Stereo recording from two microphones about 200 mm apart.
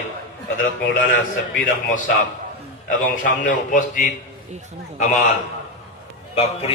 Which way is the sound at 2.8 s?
40° left (ahead or behind).